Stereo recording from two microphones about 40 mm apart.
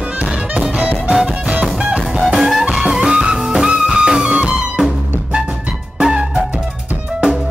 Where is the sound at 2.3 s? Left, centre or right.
Centre.